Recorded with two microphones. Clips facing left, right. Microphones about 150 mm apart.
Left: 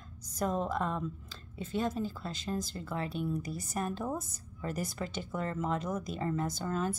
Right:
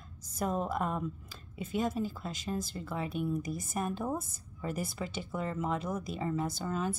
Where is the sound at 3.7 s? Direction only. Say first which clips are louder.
Even; 5° right (ahead or behind).